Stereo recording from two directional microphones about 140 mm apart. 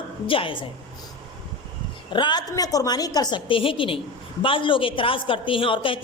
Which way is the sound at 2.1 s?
30° left (ahead or behind).